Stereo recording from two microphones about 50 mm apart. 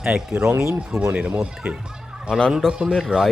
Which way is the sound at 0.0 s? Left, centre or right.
Centre.